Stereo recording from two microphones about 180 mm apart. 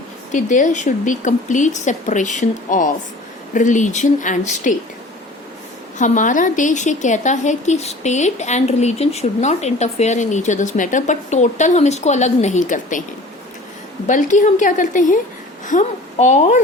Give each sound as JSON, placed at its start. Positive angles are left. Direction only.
{"t": 0.3, "sound": "speech", "side_deg": 45}
{"t": 6.0, "sound": "a woman's voice", "side_deg": 45}
{"t": 14.1, "sound": "a woman's voice", "side_deg": 45}